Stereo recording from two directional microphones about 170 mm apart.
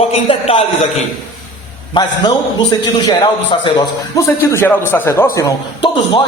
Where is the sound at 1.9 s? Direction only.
25° left (ahead or behind).